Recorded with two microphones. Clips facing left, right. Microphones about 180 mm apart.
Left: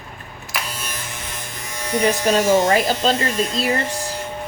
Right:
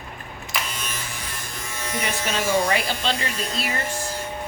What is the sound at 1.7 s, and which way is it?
Electric shaver, 15° left (ahead or behind).